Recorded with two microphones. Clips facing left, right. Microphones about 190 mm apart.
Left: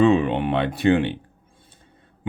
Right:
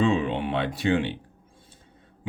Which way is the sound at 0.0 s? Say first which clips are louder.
Left 6 dB; 60° left (ahead or behind).